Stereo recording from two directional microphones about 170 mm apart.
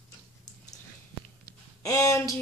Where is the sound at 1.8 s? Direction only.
20° left (ahead or behind).